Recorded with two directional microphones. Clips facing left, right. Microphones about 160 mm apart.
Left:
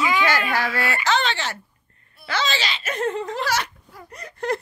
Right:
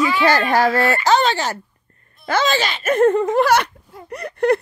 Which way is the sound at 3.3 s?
60° right (ahead or behind).